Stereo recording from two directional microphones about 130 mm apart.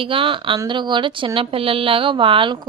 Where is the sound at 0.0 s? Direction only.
45° right (ahead or behind).